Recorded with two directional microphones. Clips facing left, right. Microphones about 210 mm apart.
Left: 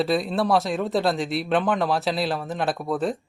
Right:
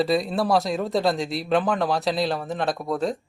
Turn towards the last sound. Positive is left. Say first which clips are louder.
# even
turn(degrees=0)  # may be behind; listen again after turning